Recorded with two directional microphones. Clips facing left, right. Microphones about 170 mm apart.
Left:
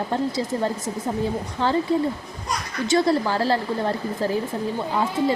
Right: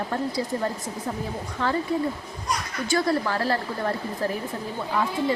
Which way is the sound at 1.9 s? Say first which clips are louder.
Left 4 dB; 30° left (ahead or behind).